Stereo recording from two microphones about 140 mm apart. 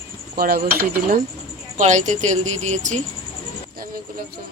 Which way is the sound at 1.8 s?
60° right (ahead or behind).